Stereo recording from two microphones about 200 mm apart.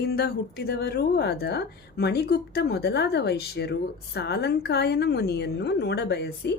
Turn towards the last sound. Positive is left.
turn(degrees=55)  # may be behind; listen again after turning